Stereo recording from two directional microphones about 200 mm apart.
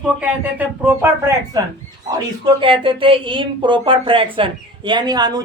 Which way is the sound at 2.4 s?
25° right (ahead or behind).